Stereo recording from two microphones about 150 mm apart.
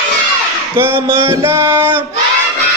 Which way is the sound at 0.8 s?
15° right (ahead or behind).